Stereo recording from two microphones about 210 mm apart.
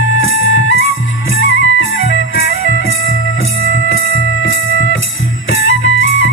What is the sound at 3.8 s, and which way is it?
Music, 70° left (ahead or behind).